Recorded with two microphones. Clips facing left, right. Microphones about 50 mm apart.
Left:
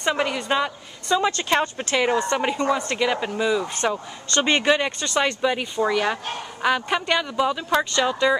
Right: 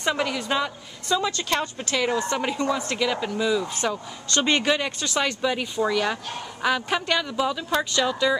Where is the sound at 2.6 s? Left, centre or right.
Centre.